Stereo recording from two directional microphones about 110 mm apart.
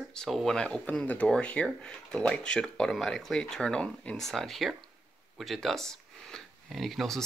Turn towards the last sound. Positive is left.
turn(degrees=0)  # may be behind; listen again after turning